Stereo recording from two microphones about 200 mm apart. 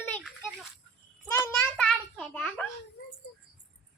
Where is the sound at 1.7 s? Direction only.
5° left (ahead or behind).